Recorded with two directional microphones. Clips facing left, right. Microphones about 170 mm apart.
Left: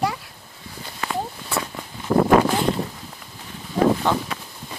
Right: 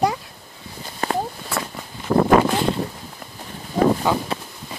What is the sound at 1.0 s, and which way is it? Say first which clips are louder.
Walk: right 4 dB; 45° right (ahead or behind).